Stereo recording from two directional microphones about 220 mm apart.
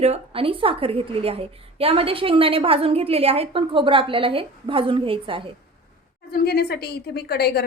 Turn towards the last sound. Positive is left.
turn(degrees=45)  # may be behind; listen again after turning